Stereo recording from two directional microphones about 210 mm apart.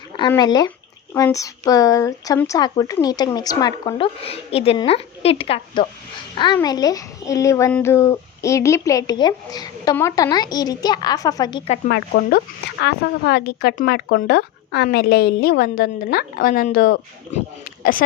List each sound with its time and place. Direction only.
0.3 s speech: 20° left (ahead or behind)
11.9 s speech: 50° left (ahead or behind)